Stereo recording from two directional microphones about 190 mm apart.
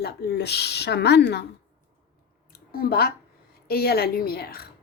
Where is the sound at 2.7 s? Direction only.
55° left (ahead or behind).